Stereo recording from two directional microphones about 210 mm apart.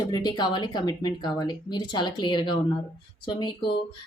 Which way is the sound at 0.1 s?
20° left (ahead or behind).